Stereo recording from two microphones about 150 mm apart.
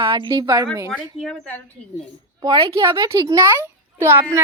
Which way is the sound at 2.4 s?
30° right (ahead or behind).